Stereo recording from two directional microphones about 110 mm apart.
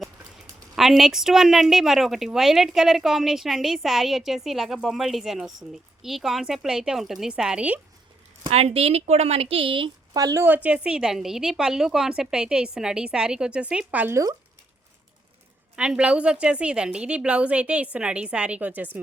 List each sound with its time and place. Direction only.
0.8 s a woman's voice: 5° right (ahead or behind)
8.4 s speech: 65° right (ahead or behind)
10.2 s speech: 35° right (ahead or behind)
10.4 s a woman's voice: 15° right (ahead or behind)
15.7 s a woman's voice: 10° right (ahead or behind)